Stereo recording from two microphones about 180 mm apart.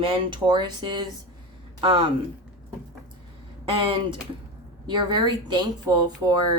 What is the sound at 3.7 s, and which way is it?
A woman's voice, 30° right (ahead or behind).